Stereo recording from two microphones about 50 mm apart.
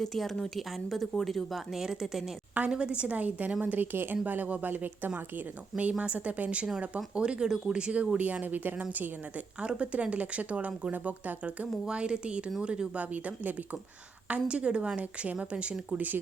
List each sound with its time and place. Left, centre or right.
0.0 s a woman's voice: centre; by 3.8 s right
3.9 s a woman's voice: right
6.0 s speech: right
9.6 s a woman's voice: right
13.0 s a woman's voice: right